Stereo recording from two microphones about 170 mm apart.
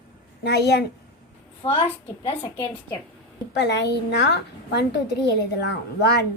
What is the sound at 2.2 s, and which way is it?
Speech, 25° left (ahead or behind).